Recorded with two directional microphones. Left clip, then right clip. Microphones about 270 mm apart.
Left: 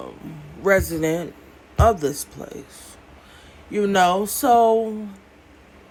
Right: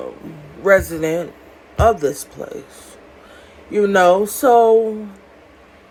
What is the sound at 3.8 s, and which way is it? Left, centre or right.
Speech, right.